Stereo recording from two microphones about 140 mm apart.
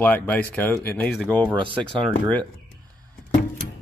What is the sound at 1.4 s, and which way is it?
Speech, 35° right (ahead or behind).